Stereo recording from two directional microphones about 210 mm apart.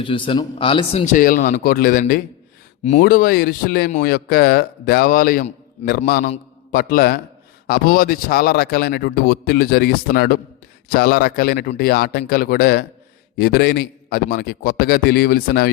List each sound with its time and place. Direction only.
0.0 s a man's voice: 25° left (ahead or behind); by 15.7 s 45° left (ahead or behind)